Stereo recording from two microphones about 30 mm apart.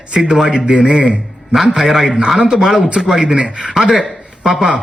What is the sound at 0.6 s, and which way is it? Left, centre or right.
Speech, right.